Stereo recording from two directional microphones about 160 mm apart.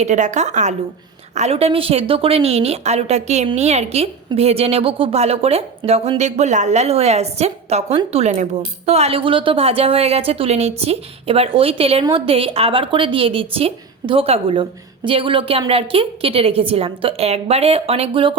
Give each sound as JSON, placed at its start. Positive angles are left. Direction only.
{"t": 0.0, "sound": "a woman's voice", "side_deg": -45}